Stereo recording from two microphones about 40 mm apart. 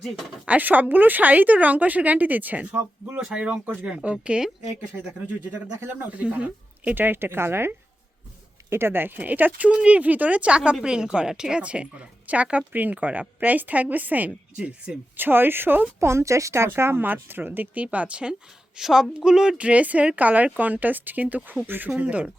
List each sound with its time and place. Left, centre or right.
0.4 s a woman's voice: right
3.8 s speech: right
6.0 s speech: right
6.9 s speech: right
8.7 s speech: right
9.1 s a woman's voice: right
9.7 s speech: right
11.6 s a woman's voice: right
15.1 s speech: right
16.6 s speech: right
17.7 s speech: right
18.8 s a woman's voice: centre
19.2 s speech: right
19.5 s speech: right